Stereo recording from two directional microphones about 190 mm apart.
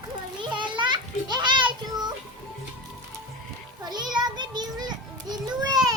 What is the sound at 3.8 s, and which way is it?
Child singing, 20° right (ahead or behind).